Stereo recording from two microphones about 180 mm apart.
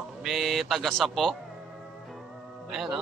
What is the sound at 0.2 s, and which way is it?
Speech, centre (ahead or behind).